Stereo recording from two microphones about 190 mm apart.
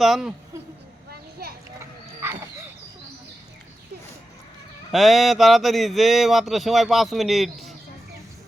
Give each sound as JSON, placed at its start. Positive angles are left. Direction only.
{"t": 0.0, "sound": "speech", "side_deg": 0}
{"t": 1.1, "sound": "a sound", "side_deg": -55}
{"t": 1.8, "sound": "wild animals", "side_deg": -15}
{"t": 4.9, "sound": "speech", "side_deg": 0}